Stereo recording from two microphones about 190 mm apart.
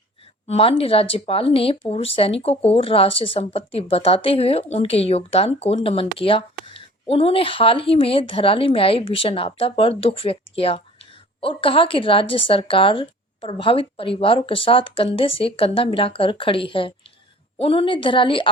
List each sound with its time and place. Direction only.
0.4 s speech: 30° left (ahead or behind)